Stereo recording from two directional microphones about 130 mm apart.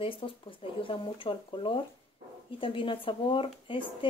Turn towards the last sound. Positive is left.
turn(degrees=40)  # may be behind; listen again after turning